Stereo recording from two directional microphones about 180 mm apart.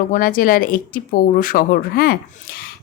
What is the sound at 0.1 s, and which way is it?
A woman's voice, 50° left (ahead or behind).